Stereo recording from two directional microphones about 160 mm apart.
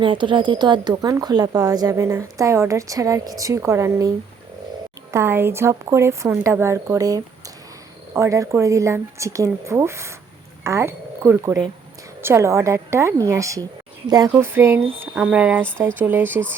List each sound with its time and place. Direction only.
0.0 s a woman's voice: 30° right (ahead or behind)
5.1 s a woman's voice: 15° right (ahead or behind)